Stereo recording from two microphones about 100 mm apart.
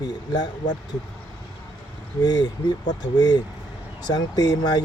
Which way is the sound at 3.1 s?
40° left (ahead or behind).